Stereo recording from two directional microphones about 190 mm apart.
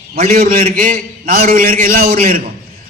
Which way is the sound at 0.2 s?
45° right (ahead or behind).